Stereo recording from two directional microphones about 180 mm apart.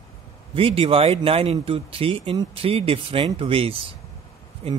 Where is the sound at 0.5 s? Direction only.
30° right (ahead or behind).